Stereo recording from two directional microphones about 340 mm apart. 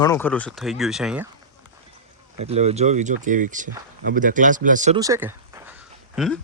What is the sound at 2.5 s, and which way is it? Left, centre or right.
Speech, centre.